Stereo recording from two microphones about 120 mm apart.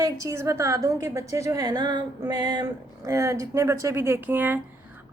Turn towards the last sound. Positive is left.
turn(degrees=-15)  # may be behind; listen again after turning